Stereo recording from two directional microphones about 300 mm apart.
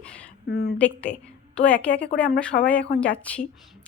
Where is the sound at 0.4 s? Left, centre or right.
Left.